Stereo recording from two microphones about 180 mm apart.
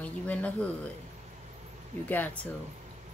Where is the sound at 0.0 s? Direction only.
5° left (ahead or behind).